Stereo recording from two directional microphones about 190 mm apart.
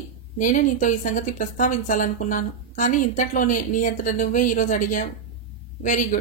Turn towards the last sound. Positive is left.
turn(degrees=45)  # may be behind; listen again after turning